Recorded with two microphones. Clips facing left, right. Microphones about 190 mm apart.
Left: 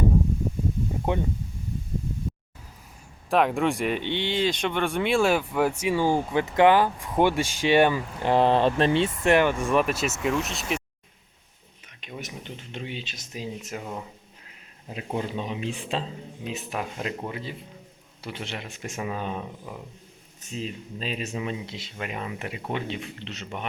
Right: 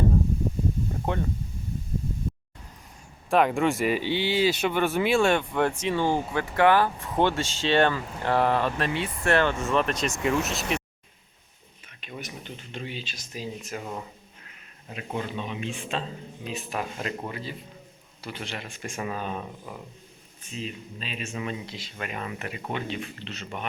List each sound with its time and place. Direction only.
1.1 s speech: 15° left (ahead or behind)
3.2 s speech: centre (ahead or behind); by 9.3 s 30° left (ahead or behind)
9.3 s speech: 10° left (ahead or behind)
11.9 s speech: 20° left (ahead or behind)
13.7 s speech: 5° left (ahead or behind)
14.8 s speech: 25° left (ahead or behind)
16.4 s speech: 20° left (ahead or behind)
20.4 s speech: 40° left (ahead or behind)
21.3 s speech: 20° left (ahead or behind)